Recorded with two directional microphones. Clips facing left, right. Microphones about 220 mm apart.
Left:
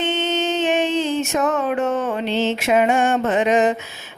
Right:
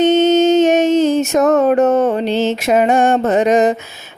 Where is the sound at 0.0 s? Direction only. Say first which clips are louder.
Right 11 dB; 40° right (ahead or behind).